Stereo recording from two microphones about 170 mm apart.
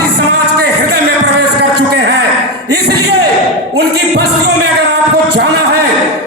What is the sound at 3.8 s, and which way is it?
Music, 75° right (ahead or behind).